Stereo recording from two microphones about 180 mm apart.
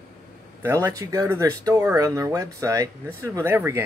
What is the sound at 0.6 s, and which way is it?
Speech, 15° right (ahead or behind).